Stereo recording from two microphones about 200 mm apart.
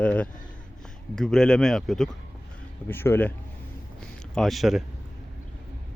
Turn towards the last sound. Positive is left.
turn(degrees=0)  # may be behind; listen again after turning